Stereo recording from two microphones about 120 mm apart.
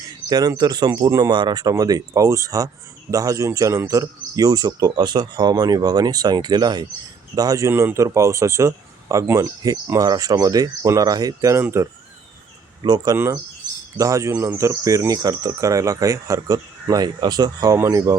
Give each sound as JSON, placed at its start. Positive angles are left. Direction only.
{"t": 0.3, "sound": "speech", "side_deg": -30}
{"t": 7.7, "sound": "speech", "side_deg": -20}
{"t": 12.8, "sound": "speech", "side_deg": -35}
{"t": 13.1, "sound": "speech", "side_deg": -20}